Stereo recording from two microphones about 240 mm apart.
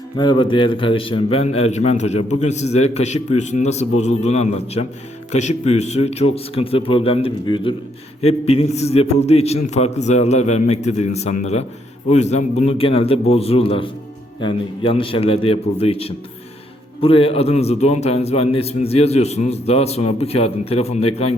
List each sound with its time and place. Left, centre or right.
0.2 s a man's voice: centre